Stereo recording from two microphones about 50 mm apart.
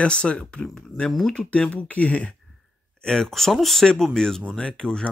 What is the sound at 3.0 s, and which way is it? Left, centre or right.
Speech, centre.